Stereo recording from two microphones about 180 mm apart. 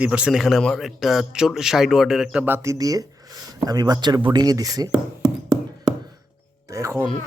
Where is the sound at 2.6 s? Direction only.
20° right (ahead or behind).